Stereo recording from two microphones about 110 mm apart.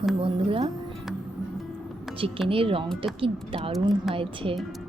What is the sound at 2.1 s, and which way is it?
A woman's voice, 55° right (ahead or behind).